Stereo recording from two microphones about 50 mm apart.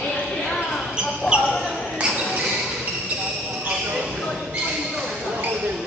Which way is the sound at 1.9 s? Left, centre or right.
Right.